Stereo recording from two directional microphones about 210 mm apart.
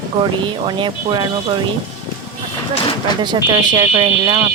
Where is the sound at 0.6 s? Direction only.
20° right (ahead or behind).